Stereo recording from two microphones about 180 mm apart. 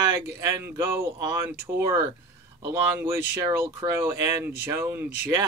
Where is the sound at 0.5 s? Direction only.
15° right (ahead or behind).